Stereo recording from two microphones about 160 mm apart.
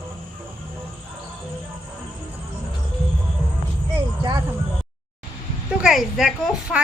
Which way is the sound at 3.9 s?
25° right (ahead or behind).